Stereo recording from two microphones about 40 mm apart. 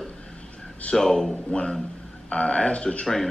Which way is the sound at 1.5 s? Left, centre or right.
Left.